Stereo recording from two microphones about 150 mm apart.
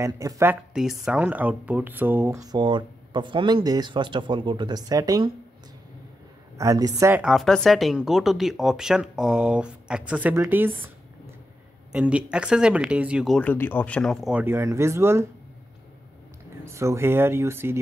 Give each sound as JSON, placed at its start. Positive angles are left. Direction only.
{"t": 0.0, "sound": "speech", "side_deg": -20}
{"t": 0.7, "sound": "speech", "side_deg": -5}
{"t": 6.6, "sound": "speech", "side_deg": -20}
{"t": 7.2, "sound": "speech", "side_deg": 0}
{"t": 11.9, "sound": "speech", "side_deg": -10}
{"t": 13.4, "sound": "speech", "side_deg": 10}
{"t": 14.4, "sound": "speech", "side_deg": -15}
{"t": 16.6, "sound": "speech", "side_deg": -20}